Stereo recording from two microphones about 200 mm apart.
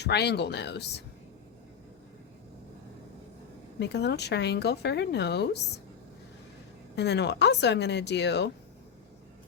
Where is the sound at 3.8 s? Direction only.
55° left (ahead or behind).